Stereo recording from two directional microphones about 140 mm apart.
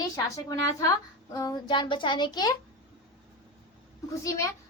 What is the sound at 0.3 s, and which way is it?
A woman's voice, 25° left (ahead or behind).